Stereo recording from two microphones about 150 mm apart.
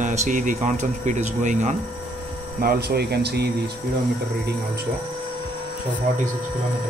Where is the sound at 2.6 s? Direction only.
90° right.